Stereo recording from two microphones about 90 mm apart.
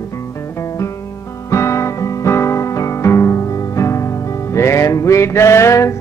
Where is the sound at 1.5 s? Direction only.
35° left (ahead or behind).